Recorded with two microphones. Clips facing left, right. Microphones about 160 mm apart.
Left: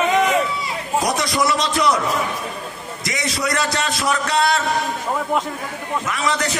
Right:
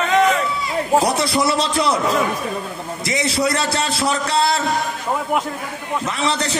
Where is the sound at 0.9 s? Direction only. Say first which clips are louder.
Right 2 dB; 30° right (ahead or behind).